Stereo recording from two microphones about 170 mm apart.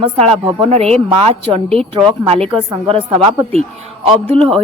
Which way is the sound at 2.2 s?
35° right (ahead or behind).